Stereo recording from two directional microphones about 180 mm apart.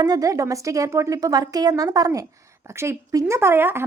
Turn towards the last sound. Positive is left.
turn(degrees=-10)  # may be behind; listen again after turning